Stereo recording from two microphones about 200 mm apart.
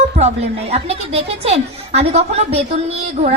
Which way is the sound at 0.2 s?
30° right (ahead or behind).